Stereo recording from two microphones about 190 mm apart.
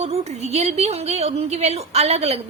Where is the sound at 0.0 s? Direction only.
35° right (ahead or behind).